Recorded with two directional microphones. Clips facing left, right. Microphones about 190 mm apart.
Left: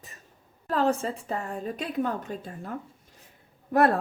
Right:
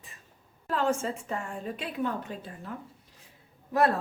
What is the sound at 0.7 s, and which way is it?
A woman's voice, 35° left (ahead or behind).